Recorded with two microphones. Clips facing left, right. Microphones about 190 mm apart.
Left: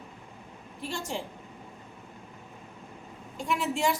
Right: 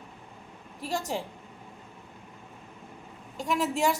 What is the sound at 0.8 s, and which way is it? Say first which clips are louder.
Speech: right 3 dB; 40° right (ahead or behind).